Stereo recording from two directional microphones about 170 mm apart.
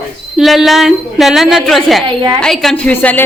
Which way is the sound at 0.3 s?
Centre (ahead or behind).